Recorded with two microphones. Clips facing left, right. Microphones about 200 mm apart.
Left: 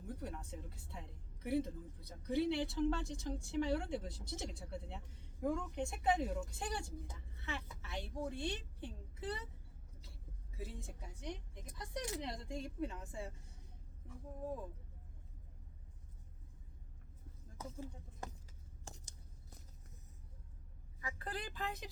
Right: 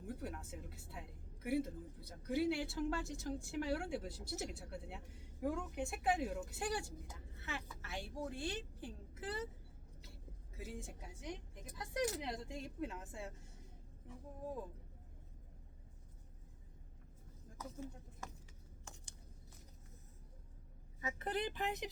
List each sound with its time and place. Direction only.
0.0 s a woman's voice: 5° right (ahead or behind)
10.5 s a woman's voice: centre (ahead or behind)
17.6 s a sound: 35° left (ahead or behind)
21.0 s a woman's voice: 20° right (ahead or behind)